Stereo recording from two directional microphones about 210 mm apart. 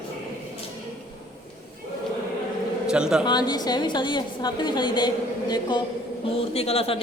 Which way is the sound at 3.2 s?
20° left (ahead or behind).